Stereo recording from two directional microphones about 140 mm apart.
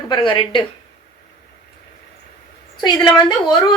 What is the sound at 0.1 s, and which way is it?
Speech, 35° left (ahead or behind).